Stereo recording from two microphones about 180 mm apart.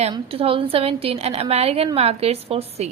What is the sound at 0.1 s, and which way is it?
A woman's voice, 30° right (ahead or behind).